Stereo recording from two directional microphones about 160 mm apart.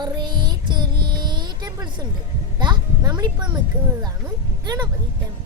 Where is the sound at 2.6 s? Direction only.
30° right (ahead or behind).